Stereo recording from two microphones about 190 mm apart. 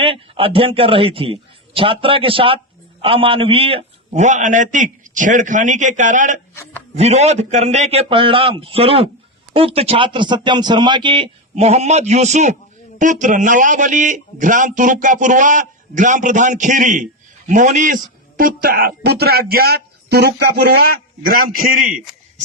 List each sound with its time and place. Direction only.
0.0 s a man's voice: 30° right (ahead or behind); by 22.0 s 45° right (ahead or behind)